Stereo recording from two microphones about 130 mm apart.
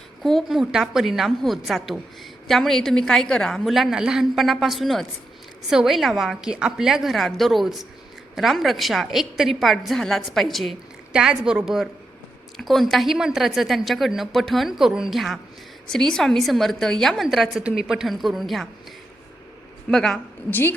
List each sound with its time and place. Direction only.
0.2 s a woman's voice: centre (ahead or behind)
19.9 s a woman's voice: 5° left (ahead or behind)
20.5 s a woman's voice: 15° left (ahead or behind)